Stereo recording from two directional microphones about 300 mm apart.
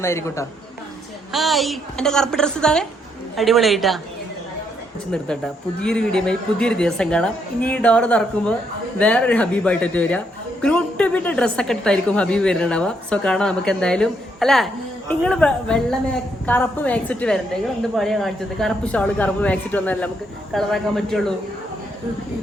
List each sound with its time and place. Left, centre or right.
0.0 s a man's voice: centre
5.8 s speech: centre